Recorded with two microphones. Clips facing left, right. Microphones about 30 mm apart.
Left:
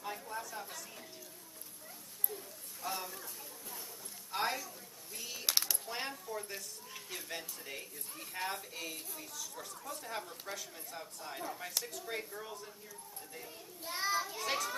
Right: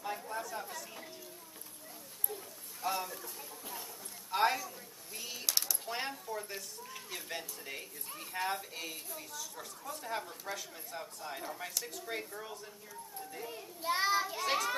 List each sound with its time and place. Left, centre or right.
0.0 s chatter: centre
2.2 s a sound: centre
8.1 s a woman's voice: centre
13.4 s a child's voice: right
14.2 s a child's voice: centre